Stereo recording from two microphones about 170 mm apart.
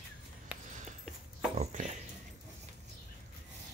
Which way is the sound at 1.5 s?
45° right (ahead or behind).